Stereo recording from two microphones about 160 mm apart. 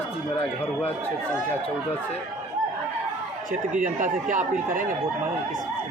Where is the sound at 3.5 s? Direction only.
55° right (ahead or behind).